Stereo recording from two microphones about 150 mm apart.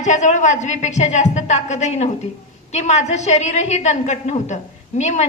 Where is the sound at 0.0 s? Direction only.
50° left (ahead or behind).